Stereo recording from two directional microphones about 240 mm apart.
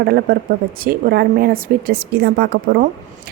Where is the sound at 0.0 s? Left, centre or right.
Right.